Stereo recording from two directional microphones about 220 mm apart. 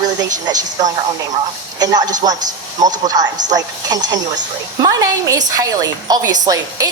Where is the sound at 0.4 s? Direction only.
15° right (ahead or behind).